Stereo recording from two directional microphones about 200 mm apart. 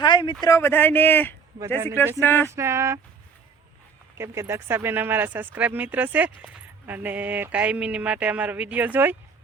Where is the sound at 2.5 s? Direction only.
15° right (ahead or behind).